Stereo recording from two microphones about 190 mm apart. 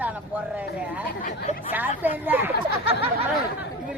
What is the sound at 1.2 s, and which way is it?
Speech, 35° left (ahead or behind).